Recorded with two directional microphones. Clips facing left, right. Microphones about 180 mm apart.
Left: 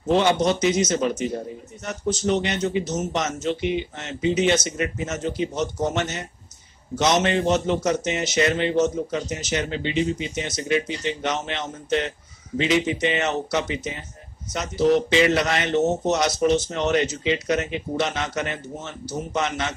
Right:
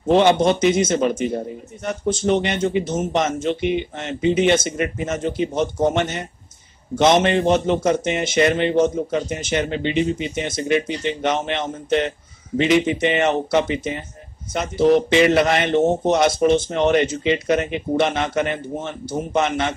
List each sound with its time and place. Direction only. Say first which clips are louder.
0.4 s a man's voice: right 4 dB; 55° right (ahead or behind)